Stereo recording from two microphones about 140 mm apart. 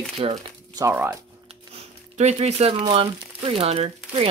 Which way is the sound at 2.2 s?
50° right (ahead or behind).